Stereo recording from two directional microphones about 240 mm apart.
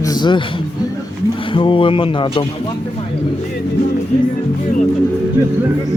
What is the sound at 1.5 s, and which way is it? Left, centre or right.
Music, left.